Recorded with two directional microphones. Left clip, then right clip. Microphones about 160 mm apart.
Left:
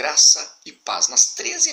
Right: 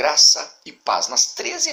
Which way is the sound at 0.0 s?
20° left (ahead or behind).